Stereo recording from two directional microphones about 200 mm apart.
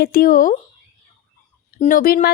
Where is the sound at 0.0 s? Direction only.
45° left (ahead or behind).